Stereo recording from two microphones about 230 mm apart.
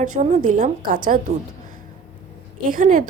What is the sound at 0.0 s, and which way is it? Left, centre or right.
A woman's voice, right.